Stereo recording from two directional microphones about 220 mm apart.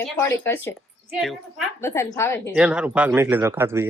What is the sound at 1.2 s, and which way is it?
Speech, centre (ahead or behind).